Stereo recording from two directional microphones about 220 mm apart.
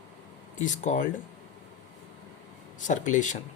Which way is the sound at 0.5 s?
35° left (ahead or behind).